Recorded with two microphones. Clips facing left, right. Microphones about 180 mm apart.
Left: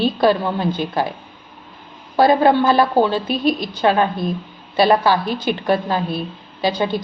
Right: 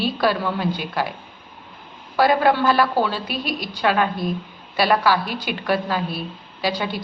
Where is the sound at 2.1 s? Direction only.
25° left (ahead or behind).